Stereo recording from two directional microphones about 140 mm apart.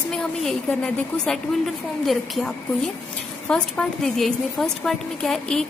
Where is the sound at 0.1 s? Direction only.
Centre (ahead or behind).